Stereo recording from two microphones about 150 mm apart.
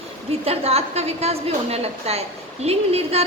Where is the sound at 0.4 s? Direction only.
40° right (ahead or behind).